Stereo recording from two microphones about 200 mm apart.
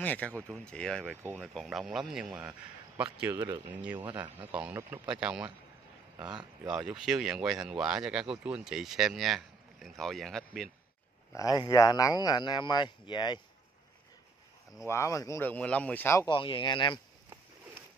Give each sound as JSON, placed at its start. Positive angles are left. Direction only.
{"t": 0.0, "sound": "speech", "side_deg": 5}
{"t": 6.7, "sound": "speech", "side_deg": -5}
{"t": 11.3, "sound": "speech", "side_deg": 20}
{"t": 14.9, "sound": "speech", "side_deg": 15}
{"t": 16.3, "sound": "speech", "side_deg": 25}